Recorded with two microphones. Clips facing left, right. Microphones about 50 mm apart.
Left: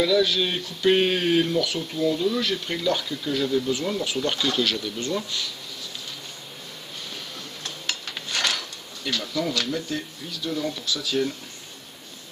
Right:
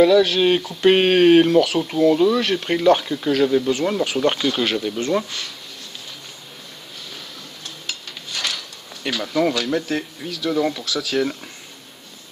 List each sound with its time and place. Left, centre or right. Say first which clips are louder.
0.0 s speech: right 7 dB; right
4.5 s speech: right 4 dB; right
4.9 s speech: right 7 dB; right
7.8 s rub: left 2 dB; left
9.2 s speech: right 9 dB; right